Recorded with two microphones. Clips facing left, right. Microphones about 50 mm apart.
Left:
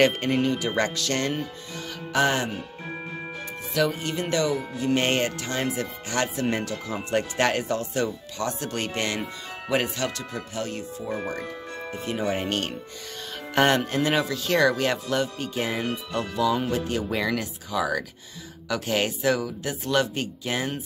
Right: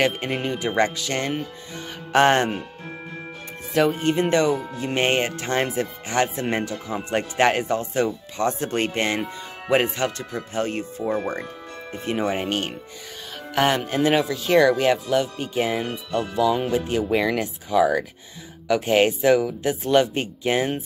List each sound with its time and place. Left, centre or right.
0.0 s speech: centre
2.1 s speech: right
3.7 s speech: right
5.4 s speech: right; by 12.7 s centre
13.6 s speech: centre; by 20.8 s right